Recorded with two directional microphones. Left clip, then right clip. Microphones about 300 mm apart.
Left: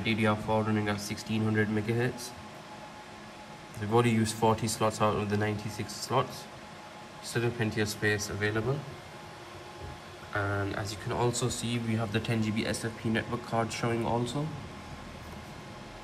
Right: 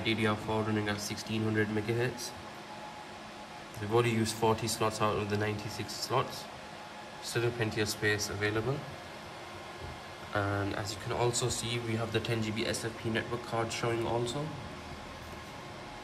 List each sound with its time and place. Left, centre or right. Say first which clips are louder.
0.0 s speech: left 2 dB; centre
3.9 s speech: left 2 dB; centre
7.2 s speech: left 1 dB; centre
10.3 s speech: left 1 dB; centre